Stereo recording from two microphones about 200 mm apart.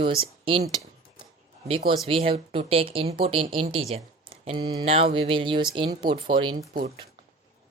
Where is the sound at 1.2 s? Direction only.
25° right (ahead or behind).